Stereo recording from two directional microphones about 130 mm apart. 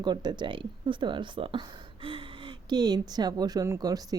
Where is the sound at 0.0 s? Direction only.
35° right (ahead or behind).